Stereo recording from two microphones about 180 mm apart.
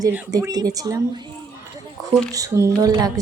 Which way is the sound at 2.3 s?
20° right (ahead or behind).